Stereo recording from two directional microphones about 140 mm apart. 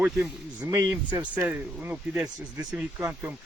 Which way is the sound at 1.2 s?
10° right (ahead or behind).